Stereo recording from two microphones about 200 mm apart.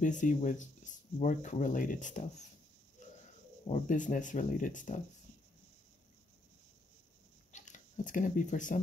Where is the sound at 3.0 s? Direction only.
35° left (ahead or behind).